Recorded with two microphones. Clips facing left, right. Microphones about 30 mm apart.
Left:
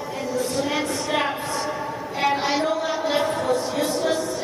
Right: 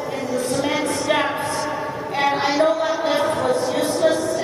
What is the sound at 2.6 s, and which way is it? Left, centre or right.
Chant, right.